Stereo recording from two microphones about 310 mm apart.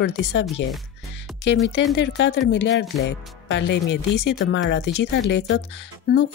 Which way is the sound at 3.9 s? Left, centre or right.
Left.